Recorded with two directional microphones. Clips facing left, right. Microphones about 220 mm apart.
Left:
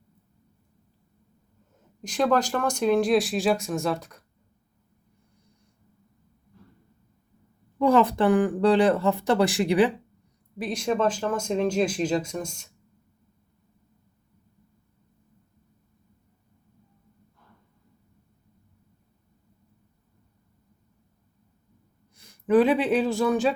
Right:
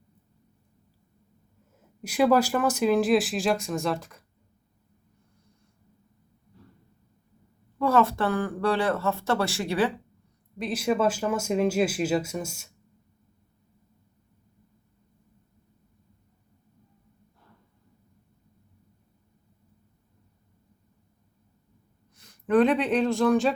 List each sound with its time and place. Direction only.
2.0 s speech: 10° right (ahead or behind)
7.8 s speech: 15° left (ahead or behind)
10.6 s speech: 5° right (ahead or behind)
22.1 s speech: 10° left (ahead or behind)